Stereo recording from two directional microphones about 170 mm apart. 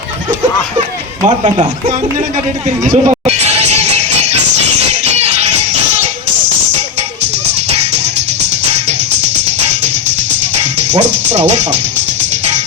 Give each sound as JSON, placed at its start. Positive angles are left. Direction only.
{"t": 2.8, "sound": "music", "side_deg": -45}
{"t": 10.6, "sound": "music", "side_deg": -40}